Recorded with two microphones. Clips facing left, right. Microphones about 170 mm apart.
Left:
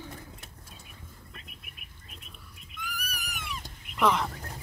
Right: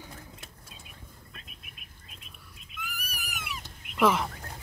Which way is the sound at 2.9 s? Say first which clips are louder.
Left 2 dB; 5° right (ahead or behind).